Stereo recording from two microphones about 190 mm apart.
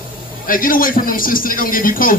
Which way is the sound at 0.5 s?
45° left (ahead or behind).